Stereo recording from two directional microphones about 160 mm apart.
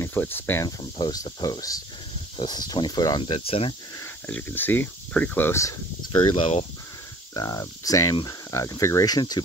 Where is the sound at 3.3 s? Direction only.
35° left (ahead or behind).